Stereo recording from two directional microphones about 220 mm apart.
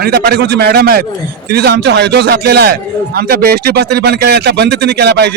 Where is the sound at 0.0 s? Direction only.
45° right (ahead or behind).